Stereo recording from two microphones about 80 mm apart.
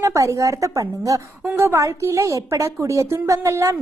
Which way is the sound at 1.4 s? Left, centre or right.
Right.